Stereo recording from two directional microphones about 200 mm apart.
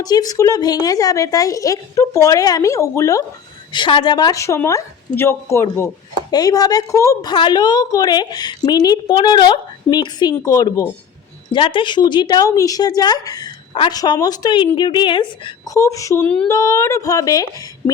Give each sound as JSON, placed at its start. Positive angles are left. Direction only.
{"t": 0.0, "sound": "speech", "side_deg": 20}